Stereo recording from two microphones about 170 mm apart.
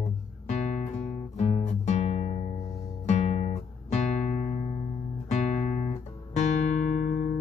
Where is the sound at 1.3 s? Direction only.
40° left (ahead or behind).